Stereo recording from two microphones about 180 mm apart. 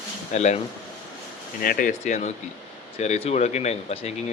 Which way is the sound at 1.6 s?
50° left (ahead or behind).